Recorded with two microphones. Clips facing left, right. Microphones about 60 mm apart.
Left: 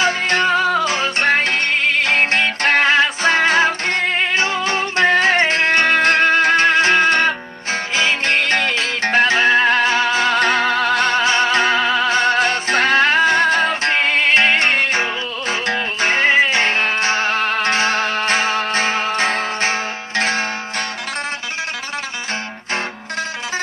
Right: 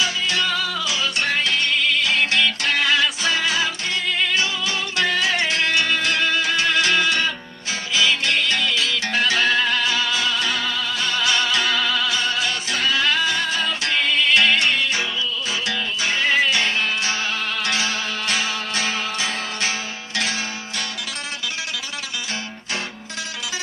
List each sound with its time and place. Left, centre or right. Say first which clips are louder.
0.0 s music: left 6 dB; left